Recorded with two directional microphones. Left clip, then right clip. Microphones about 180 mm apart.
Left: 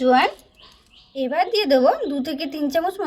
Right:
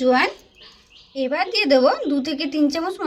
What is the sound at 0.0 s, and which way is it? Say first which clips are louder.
A woman's voice: left 1 dB; 10° left (ahead or behind).